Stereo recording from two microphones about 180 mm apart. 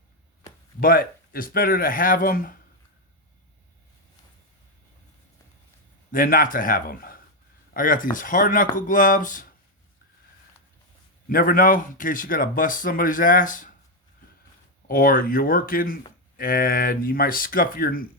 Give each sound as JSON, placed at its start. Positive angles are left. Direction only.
{"t": 0.8, "sound": "speech", "side_deg": 55}
{"t": 6.1, "sound": "speech", "side_deg": 50}
{"t": 11.3, "sound": "speech", "side_deg": 55}
{"t": 14.8, "sound": "speech", "side_deg": 50}